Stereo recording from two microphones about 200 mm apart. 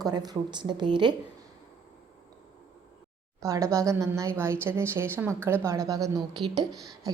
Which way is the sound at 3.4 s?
15° right (ahead or behind).